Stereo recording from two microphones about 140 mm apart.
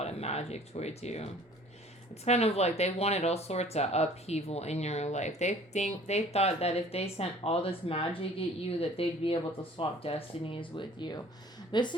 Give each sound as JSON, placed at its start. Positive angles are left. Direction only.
{"t": 0.0, "sound": "a woman's voice", "side_deg": 50}